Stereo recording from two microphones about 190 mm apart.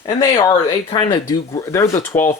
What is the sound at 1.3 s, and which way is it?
Speech, 15° left (ahead or behind).